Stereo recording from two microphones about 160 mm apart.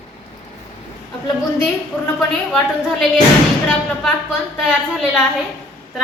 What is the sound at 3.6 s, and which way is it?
Speech, 5° left (ahead or behind).